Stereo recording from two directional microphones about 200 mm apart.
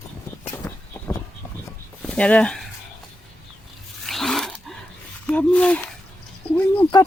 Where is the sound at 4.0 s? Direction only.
Centre (ahead or behind).